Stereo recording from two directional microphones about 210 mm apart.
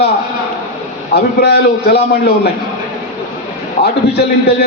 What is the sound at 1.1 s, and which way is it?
A man's voice, 50° left (ahead or behind).